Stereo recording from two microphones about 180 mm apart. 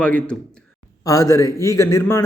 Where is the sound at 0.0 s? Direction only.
5° left (ahead or behind).